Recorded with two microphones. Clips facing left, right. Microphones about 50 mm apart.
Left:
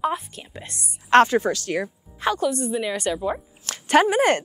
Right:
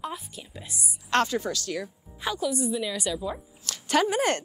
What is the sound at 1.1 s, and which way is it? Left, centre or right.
A woman's voice, left.